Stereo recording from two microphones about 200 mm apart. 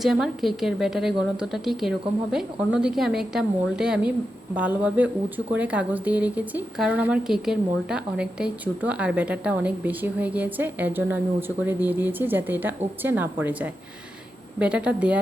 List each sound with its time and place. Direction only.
0.0 s a woman's voice: centre (ahead or behind)